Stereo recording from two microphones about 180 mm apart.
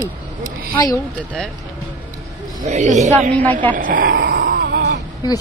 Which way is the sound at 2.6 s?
40° right (ahead or behind).